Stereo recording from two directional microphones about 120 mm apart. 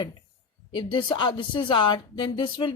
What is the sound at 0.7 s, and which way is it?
Speech, 40° left (ahead or behind).